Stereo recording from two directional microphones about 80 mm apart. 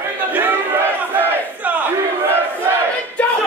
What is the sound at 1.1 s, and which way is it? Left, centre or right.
Battle cry, right.